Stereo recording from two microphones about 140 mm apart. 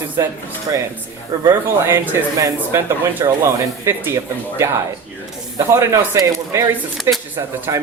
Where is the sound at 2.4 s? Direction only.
20° right (ahead or behind).